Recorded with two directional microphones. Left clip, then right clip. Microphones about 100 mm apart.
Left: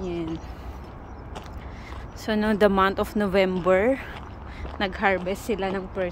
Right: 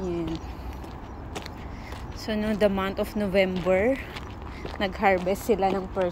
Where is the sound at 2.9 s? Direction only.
35° left (ahead or behind).